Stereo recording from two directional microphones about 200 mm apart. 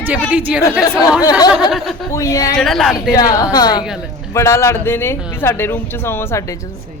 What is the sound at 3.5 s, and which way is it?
A woman's voice, 20° left (ahead or behind).